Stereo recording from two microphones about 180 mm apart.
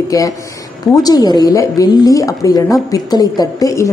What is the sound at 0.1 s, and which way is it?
A woman's voice, 20° left (ahead or behind).